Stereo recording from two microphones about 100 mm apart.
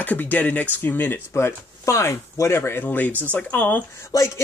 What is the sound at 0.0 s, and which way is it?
Speech, 15° left (ahead or behind).